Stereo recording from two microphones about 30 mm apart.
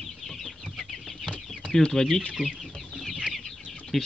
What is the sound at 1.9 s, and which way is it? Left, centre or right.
Speech, centre.